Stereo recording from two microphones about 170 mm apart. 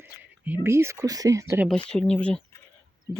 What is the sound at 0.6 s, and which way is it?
Speech, 15° right (ahead or behind).